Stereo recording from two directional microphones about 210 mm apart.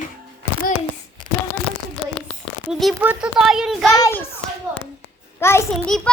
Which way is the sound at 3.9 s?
15° left (ahead or behind).